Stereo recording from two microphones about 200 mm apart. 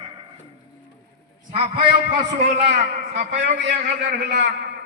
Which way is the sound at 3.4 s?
60° right (ahead or behind).